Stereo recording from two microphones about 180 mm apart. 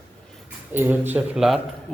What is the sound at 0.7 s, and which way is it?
Speech, 10° right (ahead or behind).